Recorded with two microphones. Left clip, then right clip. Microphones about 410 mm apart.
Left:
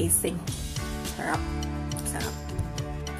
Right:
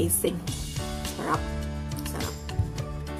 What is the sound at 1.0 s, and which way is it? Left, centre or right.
Music, centre.